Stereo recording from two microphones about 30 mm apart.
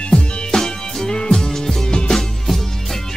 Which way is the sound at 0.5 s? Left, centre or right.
Centre.